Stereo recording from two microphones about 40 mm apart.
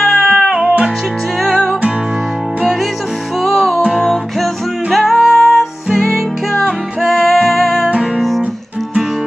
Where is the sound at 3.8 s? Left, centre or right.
Centre.